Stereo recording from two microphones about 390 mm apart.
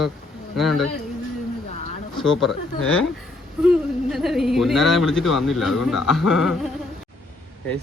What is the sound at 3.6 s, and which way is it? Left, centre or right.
Speech, centre.